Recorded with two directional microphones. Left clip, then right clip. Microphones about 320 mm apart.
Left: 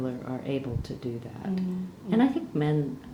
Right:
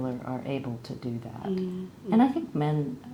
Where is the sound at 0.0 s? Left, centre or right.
Right.